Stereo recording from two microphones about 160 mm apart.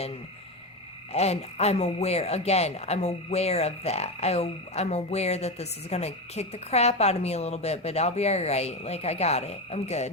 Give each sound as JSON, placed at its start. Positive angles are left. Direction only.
{"t": 1.1, "sound": "speech", "side_deg": 40}